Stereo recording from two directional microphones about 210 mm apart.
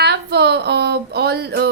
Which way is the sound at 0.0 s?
50° right (ahead or behind).